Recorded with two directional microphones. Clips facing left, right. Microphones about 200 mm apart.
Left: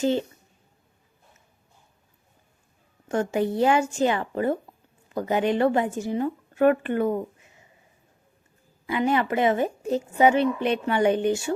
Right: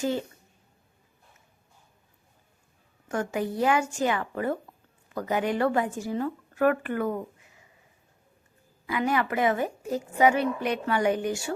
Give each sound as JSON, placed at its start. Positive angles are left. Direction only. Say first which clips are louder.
{"t": 0.0, "sound": "a woman's voice", "louder": "left 5 dB", "side_deg": 25}
{"t": 3.1, "sound": "a woman's voice", "louder": "left 5 dB", "side_deg": 25}
{"t": 8.9, "sound": "a woman's voice", "louder": "left 3 dB", "side_deg": 25}